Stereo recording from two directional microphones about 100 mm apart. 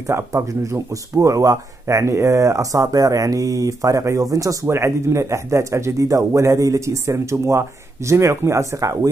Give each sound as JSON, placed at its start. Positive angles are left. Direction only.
{"t": 0.0, "sound": "speech", "side_deg": -30}